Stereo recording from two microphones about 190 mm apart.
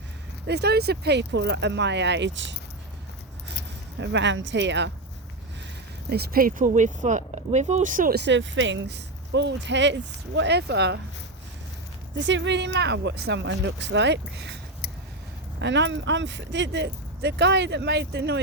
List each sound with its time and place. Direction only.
0.4 s speech: 60° right (ahead or behind)
4.0 s speech: 70° right (ahead or behind)
6.1 s speech: 55° right (ahead or behind)
8.2 s speech: 70° right (ahead or behind)
12.1 s speech: 70° right (ahead or behind)